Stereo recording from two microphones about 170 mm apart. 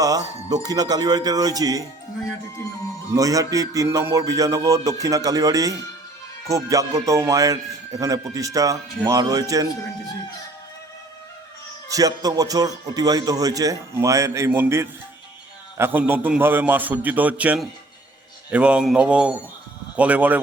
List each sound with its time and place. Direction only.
0.0 s speech: 20° right (ahead or behind)
3.2 s speech: 20° right (ahead or behind)
11.9 s a man's voice: 20° right (ahead or behind)